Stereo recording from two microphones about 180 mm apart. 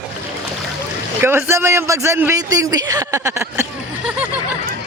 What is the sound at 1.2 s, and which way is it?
Speech, 10° right (ahead or behind).